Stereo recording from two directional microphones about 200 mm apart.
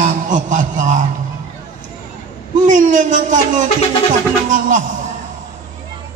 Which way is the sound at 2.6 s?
40° right (ahead or behind).